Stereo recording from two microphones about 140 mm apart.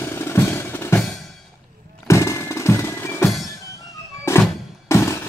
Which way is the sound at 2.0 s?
20° left (ahead or behind).